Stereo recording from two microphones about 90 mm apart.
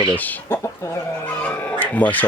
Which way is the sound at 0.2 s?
20° left (ahead or behind).